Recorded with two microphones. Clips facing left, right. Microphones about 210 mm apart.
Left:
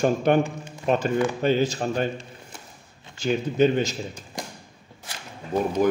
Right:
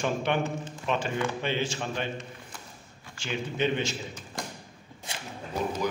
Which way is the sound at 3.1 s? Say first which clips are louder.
Left 9 dB; 40° left (ahead or behind).